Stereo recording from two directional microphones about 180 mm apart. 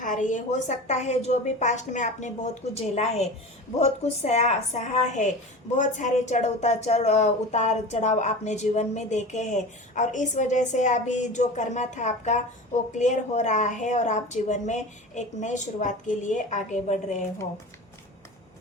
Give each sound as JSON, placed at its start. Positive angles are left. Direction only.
{"t": 0.0, "sound": "speech", "side_deg": 45}